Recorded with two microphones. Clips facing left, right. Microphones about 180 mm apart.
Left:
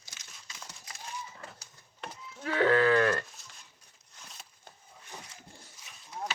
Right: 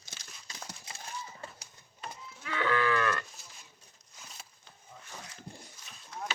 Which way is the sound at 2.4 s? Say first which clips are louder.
Left 6 dB; 40° left (ahead or behind).